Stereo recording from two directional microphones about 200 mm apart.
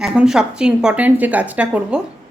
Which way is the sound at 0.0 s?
5° right (ahead or behind).